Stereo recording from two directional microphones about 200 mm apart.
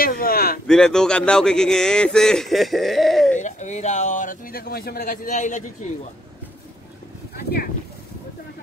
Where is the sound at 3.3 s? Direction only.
35° left (ahead or behind).